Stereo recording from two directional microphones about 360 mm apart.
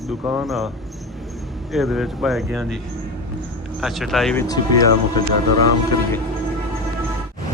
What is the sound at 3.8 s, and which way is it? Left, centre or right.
Speech, centre.